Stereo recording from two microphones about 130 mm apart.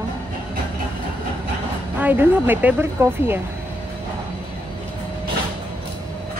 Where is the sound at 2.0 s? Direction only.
15° right (ahead or behind).